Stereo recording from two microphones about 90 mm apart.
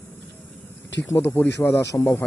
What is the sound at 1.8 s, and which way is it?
Speech, 40° left (ahead or behind).